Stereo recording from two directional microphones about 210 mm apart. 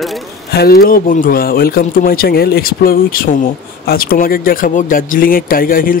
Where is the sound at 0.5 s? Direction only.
45° left (ahead or behind).